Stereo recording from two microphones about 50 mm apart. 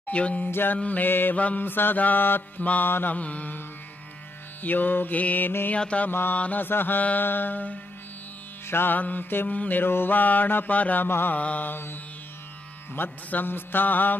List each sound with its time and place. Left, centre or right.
0.1 s carnatic music: left
0.5 s music: left
0.7 s mantra: left
1.4 s mantra: left
1.7 s music: left
2.6 s mantra: left
2.9 s mantra: left
3.2 s carnatic music: left
4.6 s mantra: left
5.8 s carnatic music: left
6.0 s mantra: left
11.1 s music: left
11.3 s mantra: left
11.7 s music: left